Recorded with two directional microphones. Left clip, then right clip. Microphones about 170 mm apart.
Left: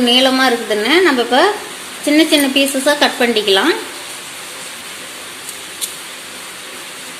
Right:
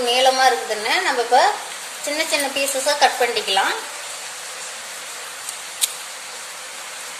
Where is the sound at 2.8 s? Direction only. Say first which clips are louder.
Left 1 dB; 45° left (ahead or behind).